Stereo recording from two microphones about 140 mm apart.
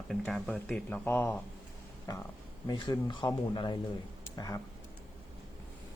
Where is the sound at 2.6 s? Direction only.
30° left (ahead or behind).